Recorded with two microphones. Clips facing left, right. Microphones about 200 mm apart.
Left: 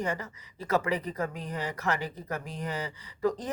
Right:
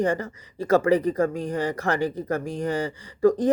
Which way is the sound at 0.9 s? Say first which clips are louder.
Right 11 dB; 30° right (ahead or behind).